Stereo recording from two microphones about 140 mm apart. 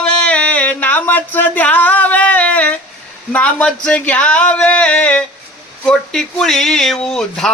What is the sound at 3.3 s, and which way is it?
Speech, 10° left (ahead or behind).